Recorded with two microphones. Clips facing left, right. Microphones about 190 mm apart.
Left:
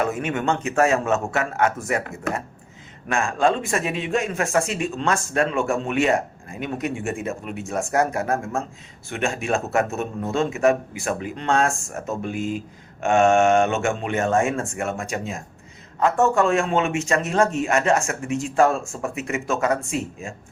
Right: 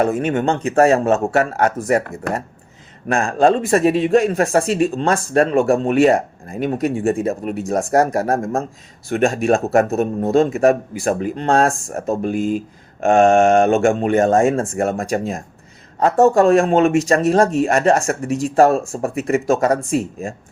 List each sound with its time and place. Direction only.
0.0 s a man's voice: 35° right (ahead or behind)
3.1 s a man's voice: 35° right (ahead or behind)